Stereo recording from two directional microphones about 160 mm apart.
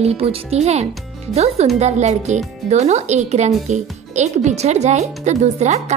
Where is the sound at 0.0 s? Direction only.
40° right (ahead or behind).